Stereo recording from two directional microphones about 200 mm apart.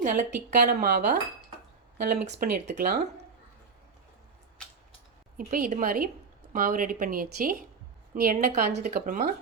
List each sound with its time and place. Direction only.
0.0 s a woman's voice: 40° right (ahead or behind)
5.4 s a woman's voice: 40° right (ahead or behind)